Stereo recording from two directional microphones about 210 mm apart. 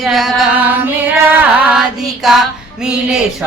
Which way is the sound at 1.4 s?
5° right (ahead or behind).